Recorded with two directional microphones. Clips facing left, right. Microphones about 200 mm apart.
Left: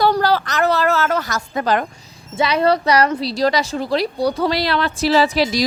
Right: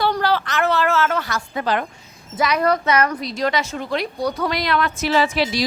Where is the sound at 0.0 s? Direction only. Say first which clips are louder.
Left 3 dB; 40° left (ahead or behind).